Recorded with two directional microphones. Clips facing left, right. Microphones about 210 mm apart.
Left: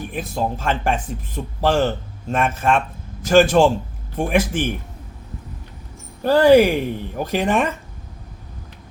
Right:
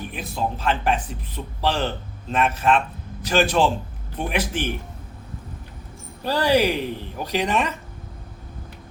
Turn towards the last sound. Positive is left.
turn(degrees=50)  # may be behind; listen again after turning